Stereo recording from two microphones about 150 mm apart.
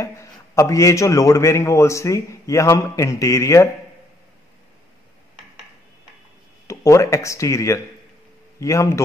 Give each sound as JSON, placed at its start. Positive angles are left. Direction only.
{"t": 0.0, "sound": "a man's voice", "side_deg": 20}
{"t": 6.7, "sound": "a man's voice", "side_deg": 20}